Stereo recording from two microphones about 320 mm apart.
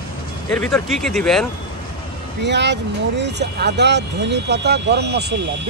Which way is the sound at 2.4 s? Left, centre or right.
Right.